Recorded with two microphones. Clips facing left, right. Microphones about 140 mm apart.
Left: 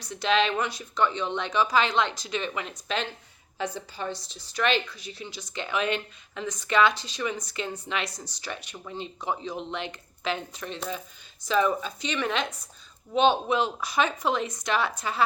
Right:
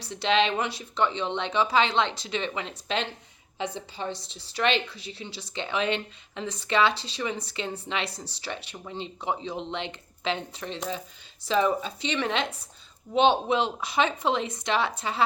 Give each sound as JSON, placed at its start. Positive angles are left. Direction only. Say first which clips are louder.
{"t": 0.0, "sound": "a woman's voice", "louder": "even", "side_deg": -30}